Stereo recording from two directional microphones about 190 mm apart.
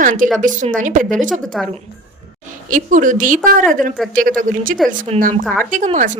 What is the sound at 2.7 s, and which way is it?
A woman's voice, 45° right (ahead or behind).